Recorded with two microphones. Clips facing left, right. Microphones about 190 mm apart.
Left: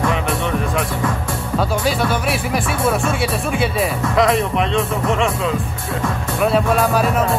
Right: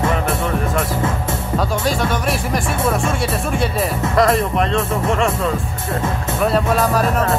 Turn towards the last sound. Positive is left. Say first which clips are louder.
# even
turn(degrees=0)  # may be behind; listen again after turning